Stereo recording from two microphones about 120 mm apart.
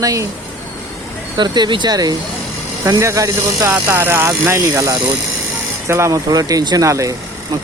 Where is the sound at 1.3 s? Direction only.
35° right (ahead or behind).